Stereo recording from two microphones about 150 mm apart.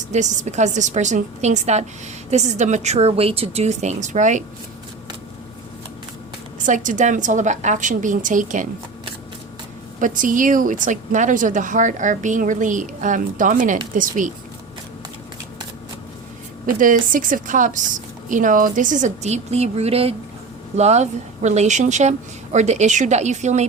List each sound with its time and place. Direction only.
0.1 s a woman's voice: 50° right (ahead or behind)
6.7 s speech: 60° right (ahead or behind)
10.0 s speech: 60° right (ahead or behind)
16.6 s a woman's voice: 60° right (ahead or behind)